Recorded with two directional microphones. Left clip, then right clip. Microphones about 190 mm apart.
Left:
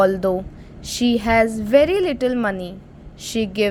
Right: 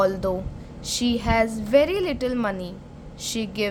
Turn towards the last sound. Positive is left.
turn(degrees=20)  # may be behind; listen again after turning